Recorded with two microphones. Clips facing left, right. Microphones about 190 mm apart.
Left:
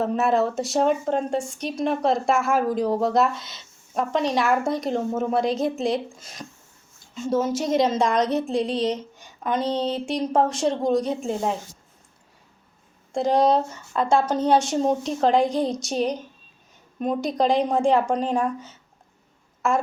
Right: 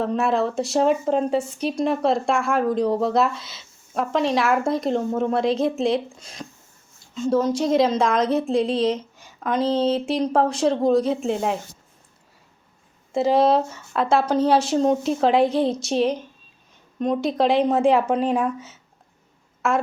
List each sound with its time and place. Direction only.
0.0 s a woman's voice: centre (ahead or behind)
13.1 s a woman's voice: 5° right (ahead or behind)